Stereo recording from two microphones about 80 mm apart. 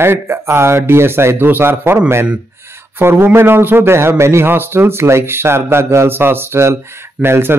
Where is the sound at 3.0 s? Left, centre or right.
Right.